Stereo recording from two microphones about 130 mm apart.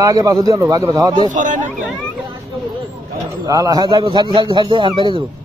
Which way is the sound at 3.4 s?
30° right (ahead or behind).